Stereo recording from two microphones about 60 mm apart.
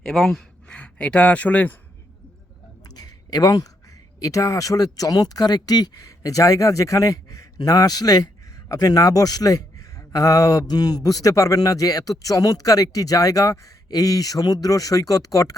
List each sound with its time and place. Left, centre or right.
0.0 s speech: centre
0.7 s speech: centre
2.8 s a sound: left
4.2 s speech: left